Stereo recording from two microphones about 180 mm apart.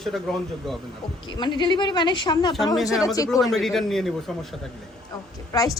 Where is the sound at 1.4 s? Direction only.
25° left (ahead or behind).